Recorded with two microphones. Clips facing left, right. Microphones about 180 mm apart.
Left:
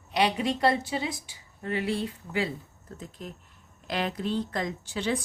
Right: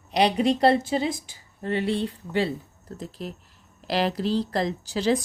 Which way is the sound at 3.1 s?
80° right.